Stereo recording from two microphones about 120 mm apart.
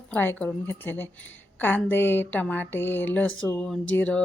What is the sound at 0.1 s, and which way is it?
Speech, 15° left (ahead or behind).